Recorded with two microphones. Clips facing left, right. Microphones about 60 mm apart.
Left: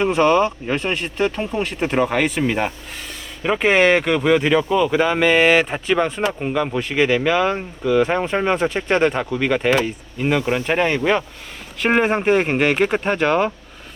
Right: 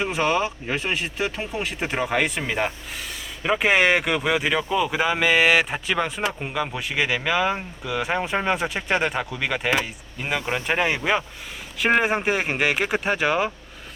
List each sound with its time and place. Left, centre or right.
0.0 s speech: centre